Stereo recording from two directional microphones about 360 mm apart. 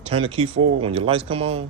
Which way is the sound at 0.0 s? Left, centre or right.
Centre.